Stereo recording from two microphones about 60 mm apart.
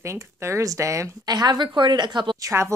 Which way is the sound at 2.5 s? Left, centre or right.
Right.